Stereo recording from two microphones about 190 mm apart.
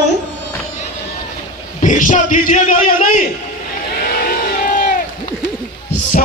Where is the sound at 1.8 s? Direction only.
40° left (ahead or behind).